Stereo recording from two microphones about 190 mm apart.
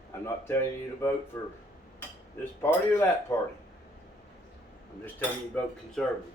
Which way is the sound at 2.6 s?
10° left (ahead or behind).